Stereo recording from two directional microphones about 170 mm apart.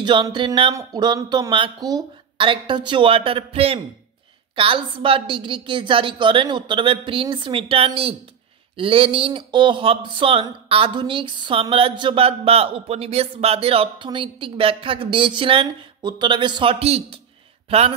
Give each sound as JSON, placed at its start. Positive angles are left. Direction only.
{"t": 0.0, "sound": "speech", "side_deg": -25}